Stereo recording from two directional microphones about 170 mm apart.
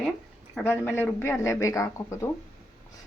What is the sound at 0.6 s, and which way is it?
Speech, 10° left (ahead or behind).